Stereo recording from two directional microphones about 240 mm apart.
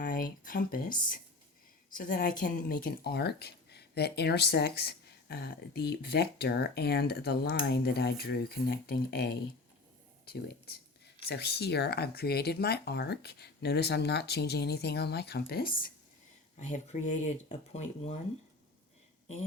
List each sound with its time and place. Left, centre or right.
0.0 s speech: left
2.0 s speech: left